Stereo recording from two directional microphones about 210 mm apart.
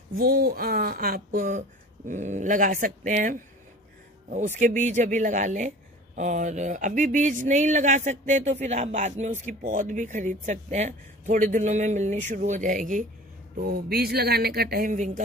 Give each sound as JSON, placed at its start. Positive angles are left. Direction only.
{"t": 0.2, "sound": "speech", "side_deg": -45}
{"t": 4.6, "sound": "speech", "side_deg": -35}